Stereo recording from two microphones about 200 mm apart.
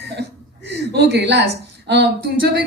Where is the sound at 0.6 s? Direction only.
55° right (ahead or behind).